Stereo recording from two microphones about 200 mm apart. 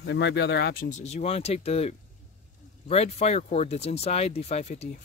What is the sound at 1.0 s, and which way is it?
Speech, 35° left (ahead or behind).